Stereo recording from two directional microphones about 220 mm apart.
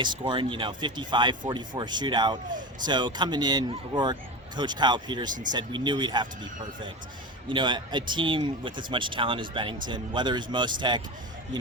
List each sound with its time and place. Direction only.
0.0 s speech: 20° right (ahead or behind)